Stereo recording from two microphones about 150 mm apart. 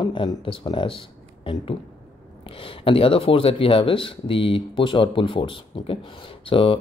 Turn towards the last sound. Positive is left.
turn(degrees=35)  # may be behind; listen again after turning